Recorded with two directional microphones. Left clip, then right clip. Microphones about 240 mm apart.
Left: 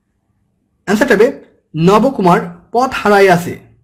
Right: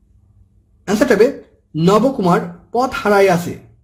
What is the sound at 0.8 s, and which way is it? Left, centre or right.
A man's voice, centre.